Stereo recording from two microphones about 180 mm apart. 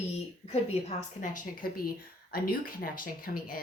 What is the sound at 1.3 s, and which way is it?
Speech, 50° left (ahead or behind).